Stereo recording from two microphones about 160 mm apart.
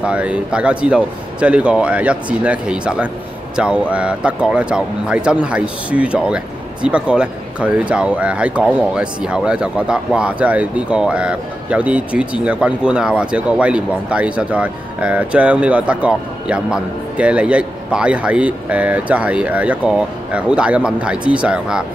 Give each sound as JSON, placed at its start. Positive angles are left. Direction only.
{"t": 0.0, "sound": "speech", "side_deg": -5}